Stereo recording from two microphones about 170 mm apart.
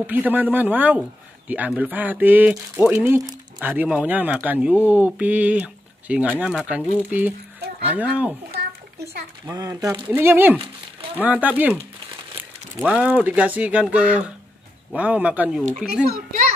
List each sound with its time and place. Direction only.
0.0 s speech: 10° right (ahead or behind)
9.5 s a child's voice: 20° right (ahead or behind)